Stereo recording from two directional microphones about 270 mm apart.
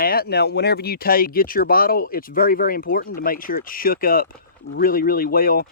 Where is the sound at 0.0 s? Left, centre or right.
Left.